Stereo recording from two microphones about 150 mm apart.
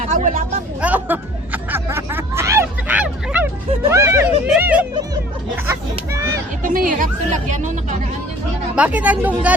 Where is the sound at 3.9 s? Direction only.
20° right (ahead or behind).